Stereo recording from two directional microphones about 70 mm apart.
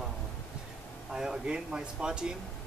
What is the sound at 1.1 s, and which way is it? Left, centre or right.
Speech, centre.